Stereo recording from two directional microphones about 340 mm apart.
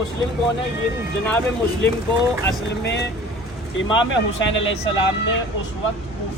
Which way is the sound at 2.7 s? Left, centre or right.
Left.